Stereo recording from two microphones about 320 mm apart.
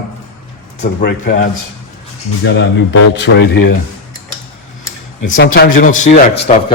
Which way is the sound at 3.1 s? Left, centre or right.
Left.